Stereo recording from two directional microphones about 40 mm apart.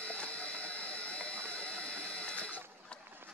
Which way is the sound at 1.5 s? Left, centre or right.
Left.